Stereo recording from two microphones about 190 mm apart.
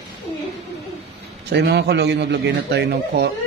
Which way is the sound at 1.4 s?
60° right (ahead or behind).